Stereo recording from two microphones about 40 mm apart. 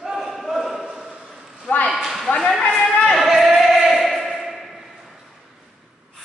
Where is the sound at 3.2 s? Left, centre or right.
Centre.